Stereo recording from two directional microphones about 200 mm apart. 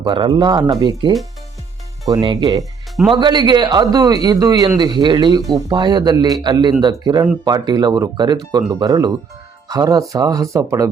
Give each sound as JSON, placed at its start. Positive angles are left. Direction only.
{"t": 0.0, "sound": "a man's voice", "side_deg": -25}
{"t": 2.2, "sound": "a man's voice", "side_deg": -25}